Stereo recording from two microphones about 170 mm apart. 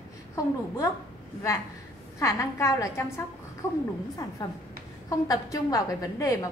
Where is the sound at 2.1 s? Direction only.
20° left (ahead or behind).